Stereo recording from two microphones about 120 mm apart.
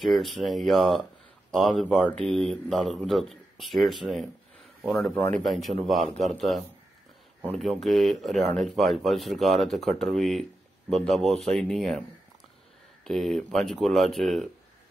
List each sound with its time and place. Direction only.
0.0 s speech: centre (ahead or behind)
5.1 s speech: 15° left (ahead or behind)
5.4 s speech: centre (ahead or behind)
13.0 s speech: centre (ahead or behind)